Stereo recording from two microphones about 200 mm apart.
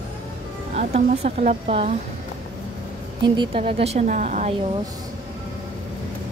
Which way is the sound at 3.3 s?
25° right (ahead or behind).